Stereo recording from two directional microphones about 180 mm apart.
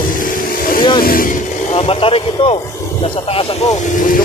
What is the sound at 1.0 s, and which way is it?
Speech, 50° left (ahead or behind).